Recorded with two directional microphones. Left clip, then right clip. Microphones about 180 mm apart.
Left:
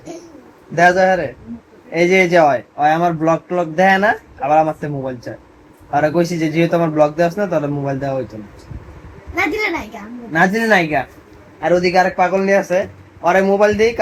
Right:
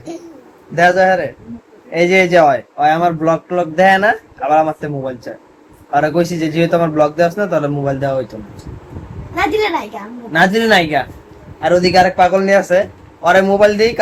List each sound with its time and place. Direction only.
0.8 s speech: 20° left (ahead or behind)
10.3 s speech: 15° left (ahead or behind)